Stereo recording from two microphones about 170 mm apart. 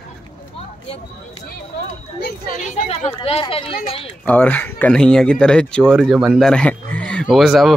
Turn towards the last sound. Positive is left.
turn(degrees=0)  # may be behind; listen again after turning